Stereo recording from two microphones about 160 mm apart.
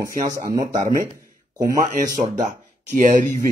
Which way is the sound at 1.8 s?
50° right (ahead or behind).